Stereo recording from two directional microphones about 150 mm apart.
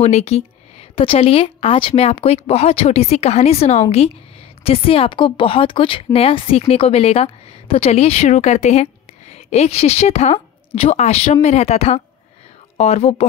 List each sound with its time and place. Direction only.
0.0 s a woman's voice: 45° left (ahead or behind)